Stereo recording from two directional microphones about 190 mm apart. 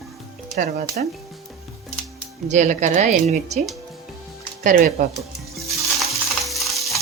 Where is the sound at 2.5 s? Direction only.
40° right (ahead or behind).